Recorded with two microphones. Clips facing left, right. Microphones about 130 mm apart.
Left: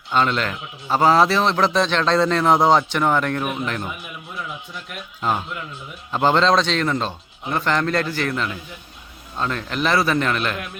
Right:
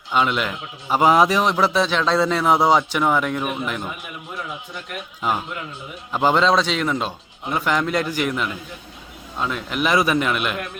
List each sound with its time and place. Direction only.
0.1 s a man's voice: 10° right (ahead or behind)